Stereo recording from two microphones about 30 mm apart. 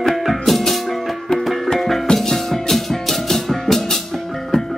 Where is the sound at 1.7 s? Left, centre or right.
Centre.